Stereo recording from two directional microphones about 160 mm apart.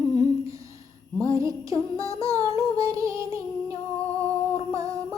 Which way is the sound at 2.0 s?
20° right (ahead or behind).